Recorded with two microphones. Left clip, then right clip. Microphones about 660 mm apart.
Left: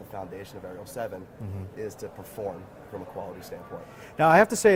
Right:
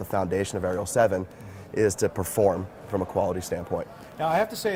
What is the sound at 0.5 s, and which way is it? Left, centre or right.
Speech, right.